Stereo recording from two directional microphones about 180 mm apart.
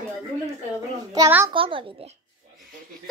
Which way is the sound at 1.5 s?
30° right (ahead or behind).